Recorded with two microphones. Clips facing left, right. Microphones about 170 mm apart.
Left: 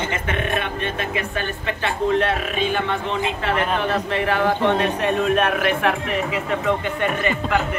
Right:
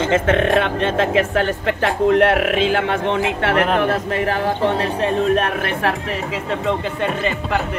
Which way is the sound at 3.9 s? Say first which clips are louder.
Right 2 dB; 40° right (ahead or behind).